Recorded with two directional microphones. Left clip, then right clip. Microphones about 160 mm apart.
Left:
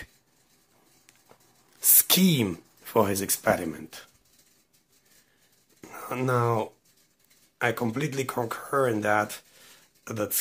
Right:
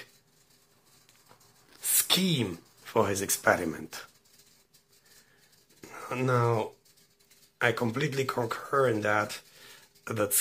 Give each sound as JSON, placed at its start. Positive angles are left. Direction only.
{"t": 1.8, "sound": "speech", "side_deg": 40}
{"t": 5.8, "sound": "a sound", "side_deg": 20}
{"t": 7.5, "sound": "speech", "side_deg": 10}
{"t": 10.0, "sound": "speech", "side_deg": 0}